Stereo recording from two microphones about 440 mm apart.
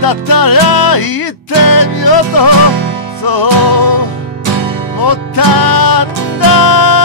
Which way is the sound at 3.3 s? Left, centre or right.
Left.